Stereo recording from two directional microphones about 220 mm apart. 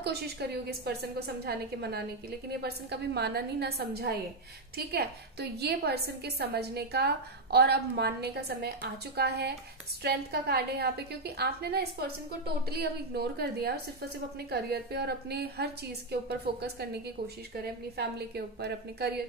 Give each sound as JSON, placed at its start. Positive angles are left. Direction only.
{"t": 0.0, "sound": "a woman's voice", "side_deg": -45}